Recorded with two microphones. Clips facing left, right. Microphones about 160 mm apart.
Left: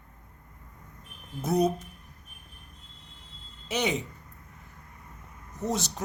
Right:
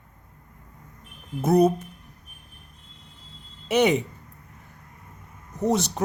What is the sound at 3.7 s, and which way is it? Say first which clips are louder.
Speech: right 9 dB; 60° right (ahead or behind).